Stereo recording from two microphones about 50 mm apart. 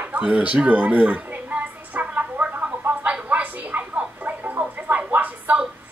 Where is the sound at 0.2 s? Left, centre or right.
Right.